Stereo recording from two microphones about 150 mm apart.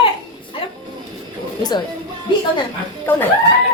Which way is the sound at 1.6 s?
30° left (ahead or behind).